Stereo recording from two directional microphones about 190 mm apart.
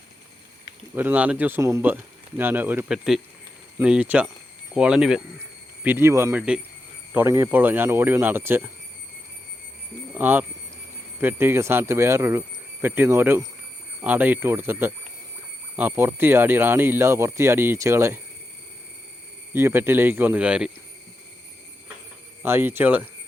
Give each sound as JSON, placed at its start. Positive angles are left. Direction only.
{"t": 0.9, "sound": "speech", "side_deg": -10}
{"t": 10.1, "sound": "speech", "side_deg": -10}
{"t": 19.5, "sound": "speech", "side_deg": -10}
{"t": 22.4, "sound": "speech", "side_deg": -10}